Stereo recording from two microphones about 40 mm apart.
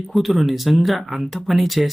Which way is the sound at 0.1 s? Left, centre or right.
Centre.